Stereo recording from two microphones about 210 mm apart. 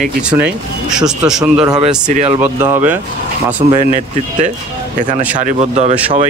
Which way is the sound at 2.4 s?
10° right (ahead or behind).